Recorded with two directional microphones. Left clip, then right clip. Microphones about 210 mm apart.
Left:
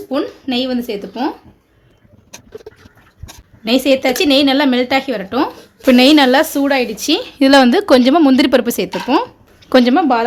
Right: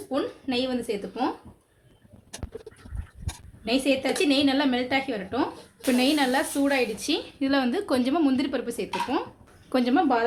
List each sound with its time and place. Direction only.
0.1 s a woman's voice: 45° left (ahead or behind)
3.6 s a woman's voice: 50° left (ahead or behind); by 8.4 s 35° left (ahead or behind)
8.4 s a woman's voice: 50° left (ahead or behind)
9.6 s speech: 40° left (ahead or behind)